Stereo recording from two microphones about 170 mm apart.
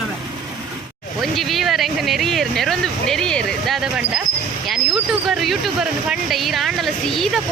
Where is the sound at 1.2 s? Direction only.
Centre (ahead or behind).